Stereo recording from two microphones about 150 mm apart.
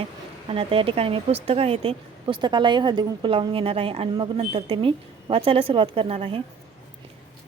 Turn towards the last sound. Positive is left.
turn(degrees=-40)  # may be behind; listen again after turning